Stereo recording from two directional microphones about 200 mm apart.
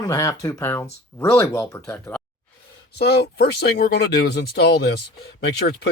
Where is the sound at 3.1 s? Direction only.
55° left (ahead or behind).